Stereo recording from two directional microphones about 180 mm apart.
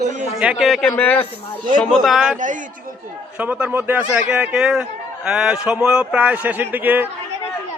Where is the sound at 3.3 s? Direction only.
10° right (ahead or behind).